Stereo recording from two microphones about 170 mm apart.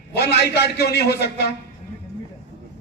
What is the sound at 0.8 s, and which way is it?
Speech, 70° left (ahead or behind).